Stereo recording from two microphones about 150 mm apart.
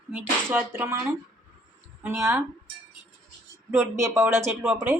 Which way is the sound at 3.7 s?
15° right (ahead or behind).